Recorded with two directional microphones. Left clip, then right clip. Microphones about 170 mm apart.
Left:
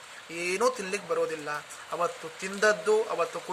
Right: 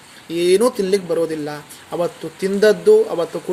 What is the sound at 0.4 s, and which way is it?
Speech, 20° left (ahead or behind).